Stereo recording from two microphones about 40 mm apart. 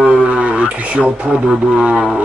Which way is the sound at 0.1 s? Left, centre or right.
Right.